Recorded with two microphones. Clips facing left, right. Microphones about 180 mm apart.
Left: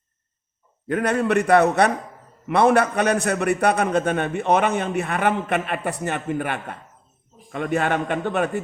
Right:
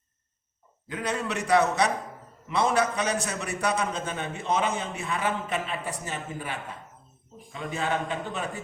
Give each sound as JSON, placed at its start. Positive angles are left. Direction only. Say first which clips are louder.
{"t": 0.9, "sound": "a man's voice", "louder": "left 10 dB", "side_deg": 60}